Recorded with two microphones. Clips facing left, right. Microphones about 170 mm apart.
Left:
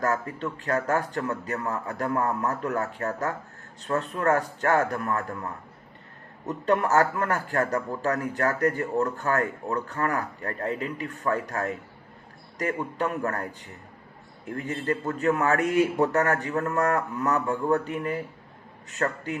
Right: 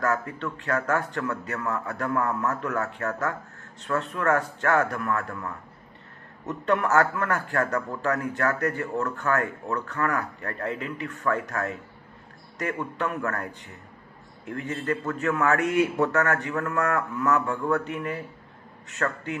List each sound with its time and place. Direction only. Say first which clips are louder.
0.0 s a man's voice: even; 35° left (ahead or behind)
6.4 s a man's voice: left 1 dB; 35° left (ahead or behind)
14.5 s a man's voice: even; 35° left (ahead or behind)